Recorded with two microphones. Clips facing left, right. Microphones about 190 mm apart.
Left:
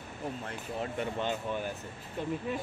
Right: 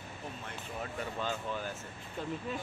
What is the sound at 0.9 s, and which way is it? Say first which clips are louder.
Speech: left 3 dB; 20° left (ahead or behind).